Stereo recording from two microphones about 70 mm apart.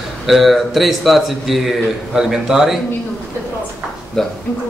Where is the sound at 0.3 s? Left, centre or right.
Centre.